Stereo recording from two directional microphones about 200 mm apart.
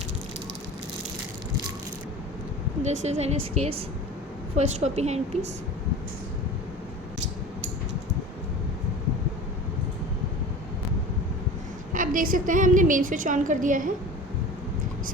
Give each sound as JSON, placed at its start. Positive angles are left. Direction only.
{"t": 2.8, "sound": "a woman's voice", "side_deg": -35}
{"t": 11.9, "sound": "a woman's voice", "side_deg": -45}